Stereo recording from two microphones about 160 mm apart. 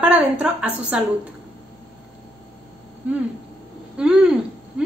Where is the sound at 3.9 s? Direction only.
5° right (ahead or behind).